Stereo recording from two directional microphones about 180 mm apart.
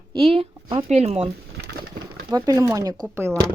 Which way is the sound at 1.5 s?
65° right (ahead or behind).